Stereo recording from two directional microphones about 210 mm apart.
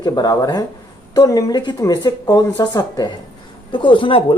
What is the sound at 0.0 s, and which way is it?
Speech, 20° left (ahead or behind).